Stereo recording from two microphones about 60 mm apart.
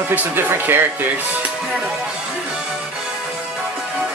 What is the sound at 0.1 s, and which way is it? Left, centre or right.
Speech, right.